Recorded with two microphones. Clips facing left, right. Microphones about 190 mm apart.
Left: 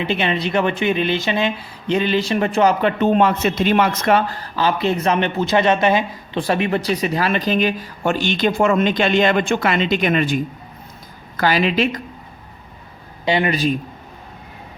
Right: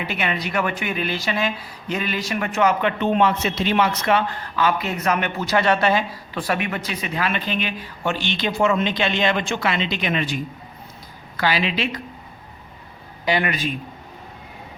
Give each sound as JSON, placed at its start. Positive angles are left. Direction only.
{"t": 0.0, "sound": "a woman's voice", "side_deg": 25}
{"t": 13.2, "sound": "speech", "side_deg": 25}